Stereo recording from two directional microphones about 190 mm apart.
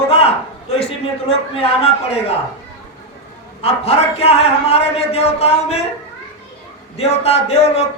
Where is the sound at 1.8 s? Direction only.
30° left (ahead or behind).